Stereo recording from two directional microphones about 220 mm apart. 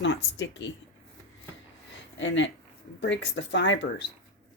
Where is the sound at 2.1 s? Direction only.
60° left (ahead or behind).